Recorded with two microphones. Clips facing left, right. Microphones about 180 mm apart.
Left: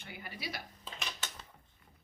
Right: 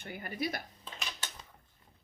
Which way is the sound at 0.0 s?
50° right (ahead or behind).